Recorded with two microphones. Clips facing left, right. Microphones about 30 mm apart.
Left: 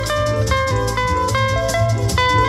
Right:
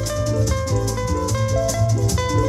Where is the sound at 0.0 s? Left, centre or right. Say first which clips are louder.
Left 4 dB; left.